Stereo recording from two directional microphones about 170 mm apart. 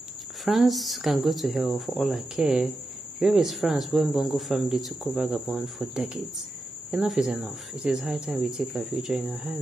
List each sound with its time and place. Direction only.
0.5 s speech: centre (ahead or behind)